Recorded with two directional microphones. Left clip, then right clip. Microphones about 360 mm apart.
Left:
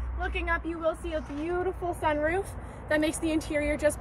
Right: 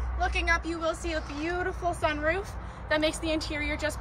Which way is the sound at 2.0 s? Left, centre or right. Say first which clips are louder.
Left 2 dB; left.